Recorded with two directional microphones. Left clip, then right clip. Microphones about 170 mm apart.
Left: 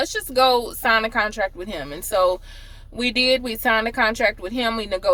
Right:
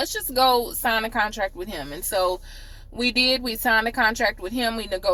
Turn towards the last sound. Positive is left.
turn(degrees=20)  # may be behind; listen again after turning